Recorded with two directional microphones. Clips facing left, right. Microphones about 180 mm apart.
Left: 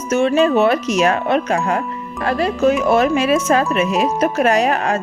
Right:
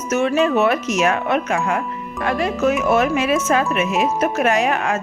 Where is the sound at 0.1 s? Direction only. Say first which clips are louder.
Left 3 dB; 30° left (ahead or behind).